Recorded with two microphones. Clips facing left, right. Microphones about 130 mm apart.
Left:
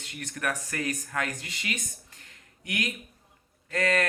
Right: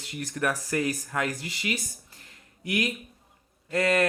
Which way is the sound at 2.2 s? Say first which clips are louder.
Right 3 dB; 30° right (ahead or behind).